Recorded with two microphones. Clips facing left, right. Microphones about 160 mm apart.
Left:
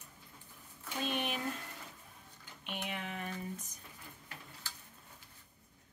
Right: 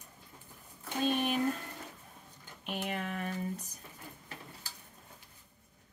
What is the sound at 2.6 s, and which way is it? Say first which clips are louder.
Speech: right 5 dB; 40° right (ahead or behind).